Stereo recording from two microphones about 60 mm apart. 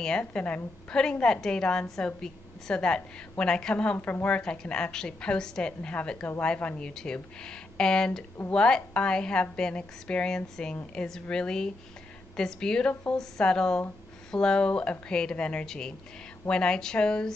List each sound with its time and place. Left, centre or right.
0.3 s a woman's voice: centre
4.4 s a woman's voice: centre